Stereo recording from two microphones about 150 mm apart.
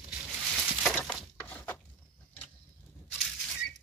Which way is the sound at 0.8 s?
5° left (ahead or behind).